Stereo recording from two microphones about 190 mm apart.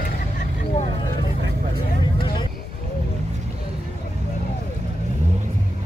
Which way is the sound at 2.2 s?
25° left (ahead or behind).